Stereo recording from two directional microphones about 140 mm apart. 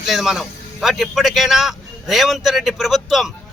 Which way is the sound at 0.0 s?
Centre (ahead or behind).